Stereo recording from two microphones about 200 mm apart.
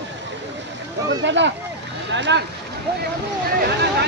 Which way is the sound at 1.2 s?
65° right (ahead or behind).